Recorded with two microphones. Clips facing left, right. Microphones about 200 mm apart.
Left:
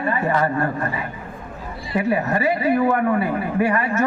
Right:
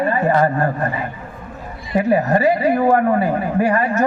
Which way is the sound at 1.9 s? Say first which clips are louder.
Right 5 dB; 35° right (ahead or behind).